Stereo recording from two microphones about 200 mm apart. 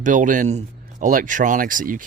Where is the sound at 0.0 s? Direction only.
40° right (ahead or behind).